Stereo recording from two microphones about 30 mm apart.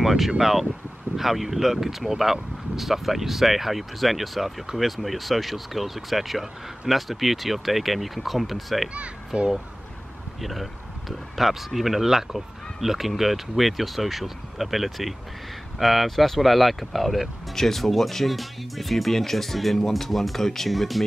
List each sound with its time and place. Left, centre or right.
0.0 s speech: centre
9.3 s speech: right
10.4 s speech: centre